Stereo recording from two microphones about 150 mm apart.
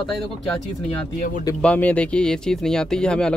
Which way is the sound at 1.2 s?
70° left (ahead or behind).